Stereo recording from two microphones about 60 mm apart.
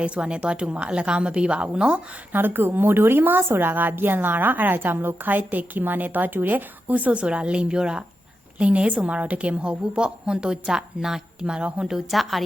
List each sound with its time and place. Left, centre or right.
0.0 s a woman's voice: centre
2.3 s a woman's voice: right; by 12.5 s centre